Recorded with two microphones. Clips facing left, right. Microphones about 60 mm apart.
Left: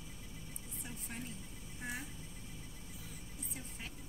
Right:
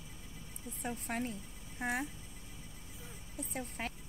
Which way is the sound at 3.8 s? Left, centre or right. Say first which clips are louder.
Right 9 dB; right.